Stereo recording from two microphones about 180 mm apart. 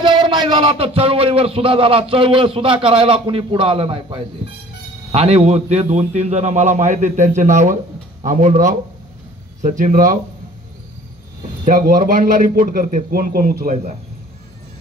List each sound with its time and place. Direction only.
0.0 s a man's voice: 25° right (ahead or behind); by 10.1 s 45° right (ahead or behind)
11.6 s a man's voice: 55° right (ahead or behind)